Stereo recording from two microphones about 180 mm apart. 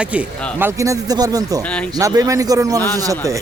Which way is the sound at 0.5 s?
15° right (ahead or behind).